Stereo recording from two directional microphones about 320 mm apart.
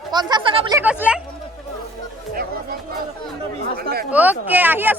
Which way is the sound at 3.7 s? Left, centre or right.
Right.